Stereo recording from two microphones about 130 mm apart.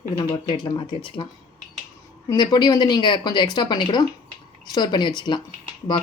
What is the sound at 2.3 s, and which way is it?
Speech, 30° left (ahead or behind).